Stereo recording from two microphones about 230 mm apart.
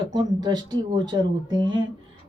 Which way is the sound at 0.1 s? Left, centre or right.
Centre.